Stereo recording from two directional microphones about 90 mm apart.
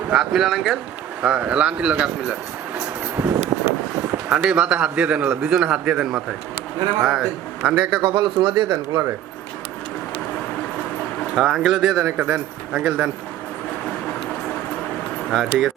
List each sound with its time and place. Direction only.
0.1 s speech: 5° right (ahead or behind)
1.2 s a man's voice: 15° right (ahead or behind)
3.2 s a sound: 20° right (ahead or behind)
4.3 s a man's voice: 10° right (ahead or behind)
7.7 s a man's voice: 15° right (ahead or behind)
8.0 s speech: 60° right (ahead or behind)
11.3 s speech: centre (ahead or behind)
12.0 s a man's voice: 15° right (ahead or behind)
15.3 s speech: centre (ahead or behind)